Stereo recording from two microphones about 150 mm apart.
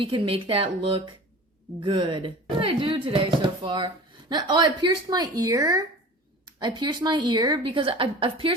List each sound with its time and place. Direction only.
0.0 s speech: 35° right (ahead or behind)